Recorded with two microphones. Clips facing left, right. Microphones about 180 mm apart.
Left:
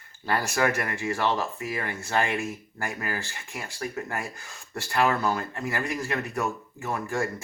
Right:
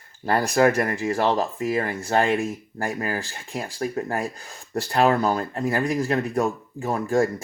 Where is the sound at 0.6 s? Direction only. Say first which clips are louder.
Right 8 dB; 40° right (ahead or behind).